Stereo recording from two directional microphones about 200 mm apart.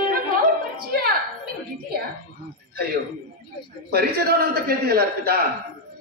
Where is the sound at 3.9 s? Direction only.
50° right (ahead or behind).